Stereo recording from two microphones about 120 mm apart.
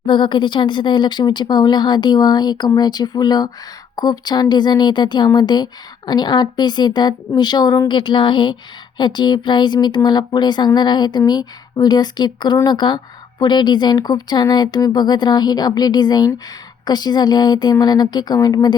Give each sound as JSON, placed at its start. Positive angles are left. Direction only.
{"t": 0.0, "sound": "speech", "side_deg": 40}